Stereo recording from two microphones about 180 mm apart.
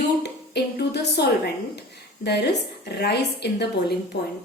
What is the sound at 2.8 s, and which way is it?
A woman's voice, 65° left (ahead or behind).